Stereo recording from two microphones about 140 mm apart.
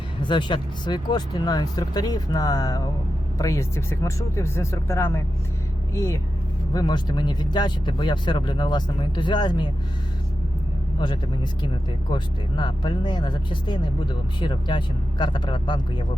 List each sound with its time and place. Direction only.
0.2 s speech: 35° left (ahead or behind)
6.7 s speech: 30° left (ahead or behind)
11.6 s speech: 35° left (ahead or behind)